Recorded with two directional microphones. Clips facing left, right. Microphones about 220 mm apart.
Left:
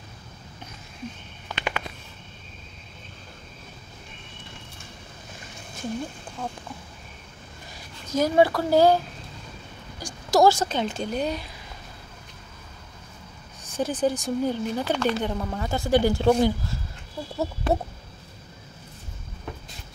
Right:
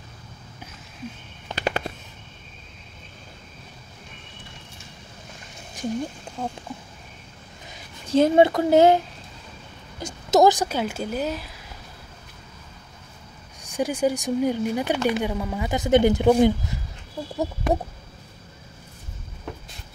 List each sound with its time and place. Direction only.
1.5 s fireworks: 40° right (ahead or behind)
5.8 s speech: 15° right (ahead or behind)
8.1 s speech: 25° right (ahead or behind); by 11.5 s 5° right (ahead or behind)
13.7 s speech: 15° right (ahead or behind)